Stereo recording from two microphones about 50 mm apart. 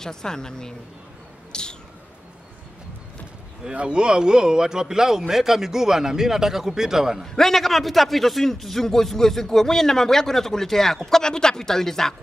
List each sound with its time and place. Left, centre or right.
0.0 s a man's voice: centre
1.5 s bird: centre
3.7 s a man's voice: centre
7.3 s a man's voice: centre